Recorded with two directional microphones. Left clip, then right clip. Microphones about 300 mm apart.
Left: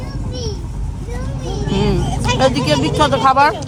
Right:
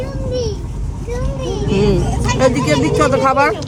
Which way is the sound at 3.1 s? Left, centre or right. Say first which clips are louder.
Left 3 dB; centre.